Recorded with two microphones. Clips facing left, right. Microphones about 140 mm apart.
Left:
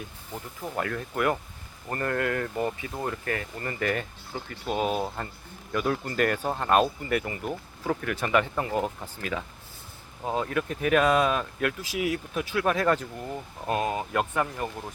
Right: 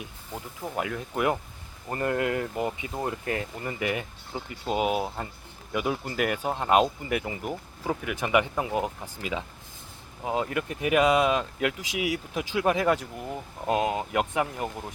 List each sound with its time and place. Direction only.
0.6 s speech: 10° right (ahead or behind)
3.6 s speech: 10° right (ahead or behind)